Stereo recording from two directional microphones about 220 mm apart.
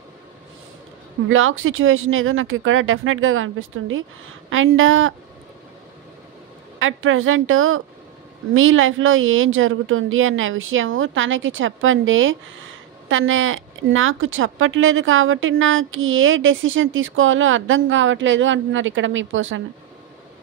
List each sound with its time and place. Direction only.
1.3 s speech: 65° right (ahead or behind)
6.8 s speech: 65° right (ahead or behind)